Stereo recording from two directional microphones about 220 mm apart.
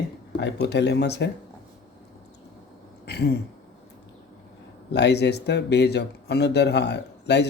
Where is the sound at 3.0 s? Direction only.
50° left (ahead or behind).